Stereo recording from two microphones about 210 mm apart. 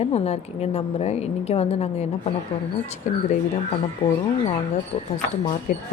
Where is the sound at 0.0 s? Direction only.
30° left (ahead or behind).